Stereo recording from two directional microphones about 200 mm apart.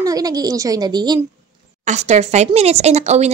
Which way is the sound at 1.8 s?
35° right (ahead or behind).